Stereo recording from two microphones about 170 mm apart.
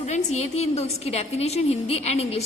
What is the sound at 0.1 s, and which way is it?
A woman's voice, 40° left (ahead or behind).